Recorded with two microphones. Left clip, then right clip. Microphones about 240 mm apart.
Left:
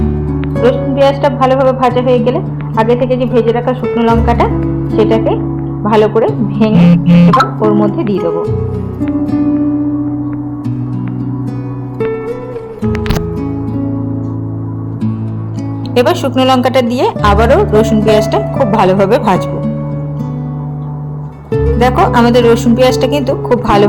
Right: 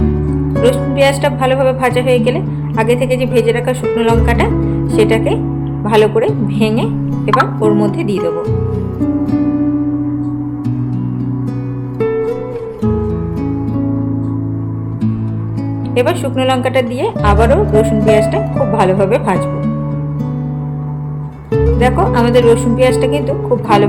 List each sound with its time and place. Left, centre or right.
0.0 s music: centre
5.8 s a woman's voice: centre
9.0 s music: centre
11.9 s music: centre
16.0 s speech: centre
21.5 s music: centre
21.8 s speech: centre